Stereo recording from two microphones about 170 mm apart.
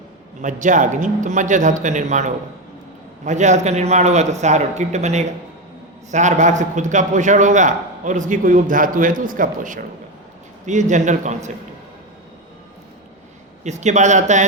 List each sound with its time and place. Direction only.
0.4 s a man's voice: 50° right (ahead or behind)
13.7 s a man's voice: 45° right (ahead or behind)